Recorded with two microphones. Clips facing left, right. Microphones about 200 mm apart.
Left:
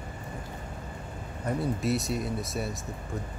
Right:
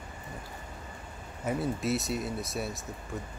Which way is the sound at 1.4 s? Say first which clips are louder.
Left 1 dB; 5° right (ahead or behind).